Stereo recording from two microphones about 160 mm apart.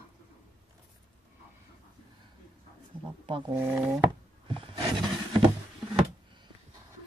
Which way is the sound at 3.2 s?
30° right (ahead or behind).